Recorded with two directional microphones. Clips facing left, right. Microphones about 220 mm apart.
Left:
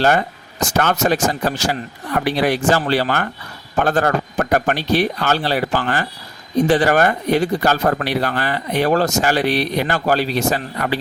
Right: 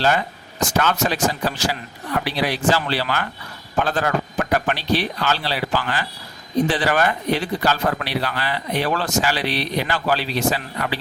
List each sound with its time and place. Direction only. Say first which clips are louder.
0.0 s speech: left 4 dB; 50° left (ahead or behind)